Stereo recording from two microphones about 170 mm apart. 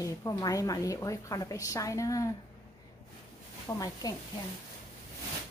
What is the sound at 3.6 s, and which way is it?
Speech, 20° left (ahead or behind).